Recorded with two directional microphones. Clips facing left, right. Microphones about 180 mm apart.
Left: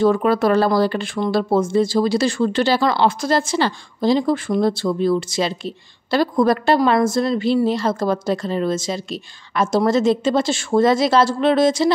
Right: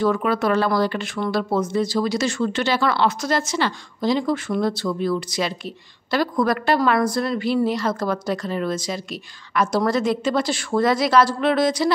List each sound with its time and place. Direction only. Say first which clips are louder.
0.0 s speech: left 4 dB; 35° left (ahead or behind)